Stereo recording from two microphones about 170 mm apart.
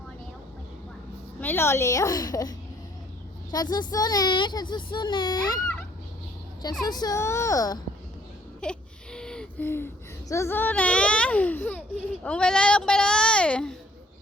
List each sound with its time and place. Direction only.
1.4 s a child's voice: 10° left (ahead or behind)
6.8 s a child's voice: 25° left (ahead or behind)
8.6 s a child's voice: 5° left (ahead or behind)